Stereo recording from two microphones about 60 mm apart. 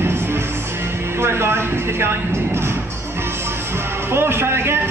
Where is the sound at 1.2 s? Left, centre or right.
Right.